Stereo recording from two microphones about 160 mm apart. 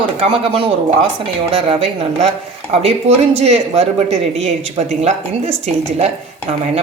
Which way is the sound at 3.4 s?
40° right (ahead or behind).